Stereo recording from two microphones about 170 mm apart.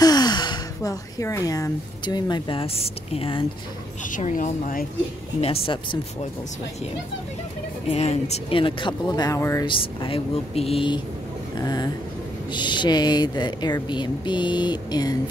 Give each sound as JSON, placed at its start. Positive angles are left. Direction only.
{"t": 0.0, "sound": "speech", "side_deg": 25}
{"t": 4.1, "sound": "speech", "side_deg": 50}
{"t": 5.4, "sound": "speech", "side_deg": 30}
{"t": 7.9, "sound": "speech", "side_deg": 40}
{"t": 9.7, "sound": "speech", "side_deg": 30}